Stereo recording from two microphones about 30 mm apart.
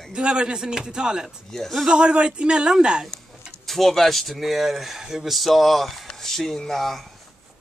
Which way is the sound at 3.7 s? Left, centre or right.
Centre.